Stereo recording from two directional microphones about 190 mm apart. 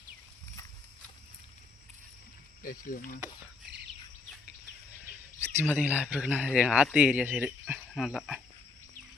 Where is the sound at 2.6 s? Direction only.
45° left (ahead or behind).